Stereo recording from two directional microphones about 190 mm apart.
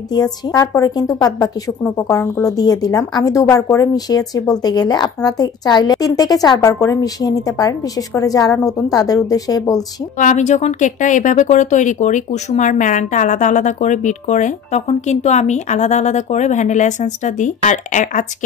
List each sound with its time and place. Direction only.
0.1 s a woman's voice: 20° left (ahead or behind)
10.1 s speech: 40° left (ahead or behind)